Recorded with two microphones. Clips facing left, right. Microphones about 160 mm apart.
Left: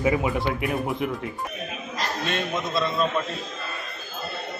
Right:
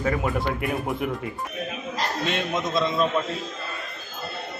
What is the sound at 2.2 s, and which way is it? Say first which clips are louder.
Speech: right 1 dB; 15° right (ahead or behind).